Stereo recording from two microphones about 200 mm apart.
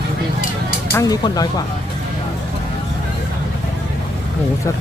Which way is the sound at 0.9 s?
15° left (ahead or behind).